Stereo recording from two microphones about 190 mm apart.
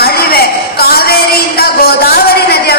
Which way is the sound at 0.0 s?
55° left (ahead or behind).